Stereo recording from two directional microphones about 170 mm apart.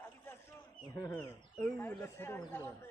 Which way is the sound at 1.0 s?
15° left (ahead or behind).